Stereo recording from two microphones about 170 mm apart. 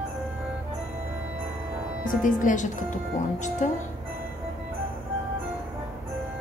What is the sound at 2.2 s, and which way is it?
A woman's voice, 50° left (ahead or behind).